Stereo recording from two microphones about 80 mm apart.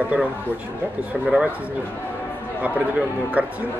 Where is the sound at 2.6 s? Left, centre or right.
Centre.